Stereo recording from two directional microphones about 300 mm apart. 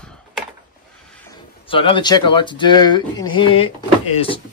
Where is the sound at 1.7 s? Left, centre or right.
Centre.